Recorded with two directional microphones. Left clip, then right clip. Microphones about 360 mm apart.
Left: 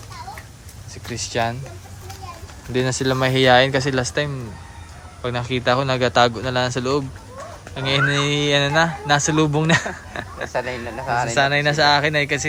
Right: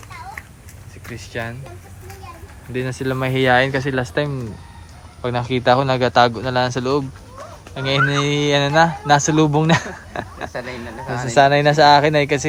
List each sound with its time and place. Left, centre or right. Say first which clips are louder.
1.0 s speech: left 6 dB; centre
2.7 s speech: left 3 dB; centre
11.1 s speech: left 5 dB; centre
11.3 s speech: right 7 dB; centre